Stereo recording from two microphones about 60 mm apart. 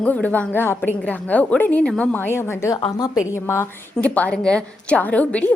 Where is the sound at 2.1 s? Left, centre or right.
Left.